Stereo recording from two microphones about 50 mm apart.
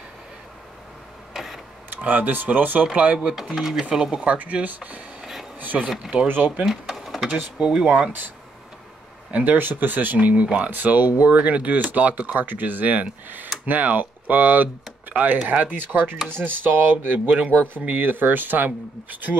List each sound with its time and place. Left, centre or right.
1.3 s printer: centre
2.0 s speech: right
3.5 s speech: centre
4.2 s speech: right
5.2 s a sound: centre
5.6 s speech: right
6.6 s speech: centre
7.3 s speech: centre
9.3 s speech: right
10.1 s speech: right